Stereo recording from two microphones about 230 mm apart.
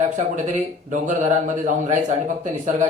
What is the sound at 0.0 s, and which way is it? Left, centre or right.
A man's voice, right.